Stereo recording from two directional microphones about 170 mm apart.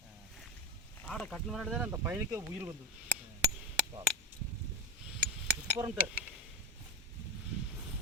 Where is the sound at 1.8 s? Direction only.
10° right (ahead or behind).